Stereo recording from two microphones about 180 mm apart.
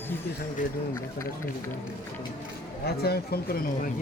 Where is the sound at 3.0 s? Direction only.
60° left (ahead or behind).